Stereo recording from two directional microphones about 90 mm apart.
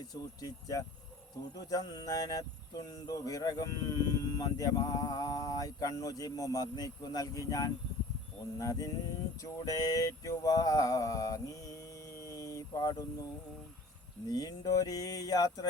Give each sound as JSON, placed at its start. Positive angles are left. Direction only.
{"t": 0.0, "sound": "speech", "side_deg": 45}
{"t": 9.4, "sound": "a sound", "side_deg": 40}
{"t": 14.3, "sound": "speech", "side_deg": 45}